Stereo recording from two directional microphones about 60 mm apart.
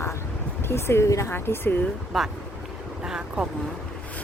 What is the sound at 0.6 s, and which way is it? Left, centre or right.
Speech, left.